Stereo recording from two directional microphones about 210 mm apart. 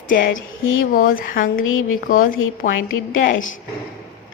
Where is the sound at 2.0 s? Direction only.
40° left (ahead or behind).